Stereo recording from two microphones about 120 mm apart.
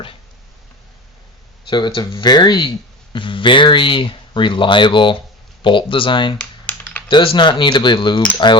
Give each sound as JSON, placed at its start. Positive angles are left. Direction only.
{"t": 1.7, "sound": "speech", "side_deg": 40}
{"t": 6.7, "sound": "typing", "side_deg": 10}
{"t": 7.1, "sound": "speech", "side_deg": 45}